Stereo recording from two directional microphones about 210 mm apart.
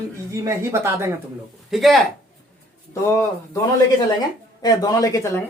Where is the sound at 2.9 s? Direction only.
15° left (ahead or behind).